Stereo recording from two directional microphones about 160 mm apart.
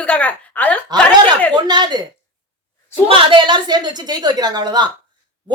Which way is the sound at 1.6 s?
25° right (ahead or behind).